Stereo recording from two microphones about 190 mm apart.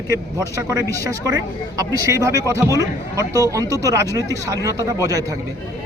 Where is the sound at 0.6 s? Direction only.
15° right (ahead or behind).